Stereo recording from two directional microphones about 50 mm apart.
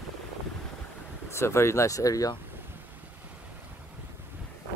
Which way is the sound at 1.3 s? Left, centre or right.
Left.